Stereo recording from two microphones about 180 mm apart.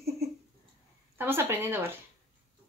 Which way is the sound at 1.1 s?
10° right (ahead or behind).